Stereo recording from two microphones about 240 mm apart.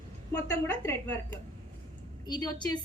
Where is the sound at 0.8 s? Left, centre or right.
Centre.